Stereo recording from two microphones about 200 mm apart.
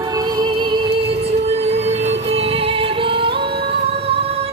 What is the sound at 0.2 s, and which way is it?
Music, 20° right (ahead or behind).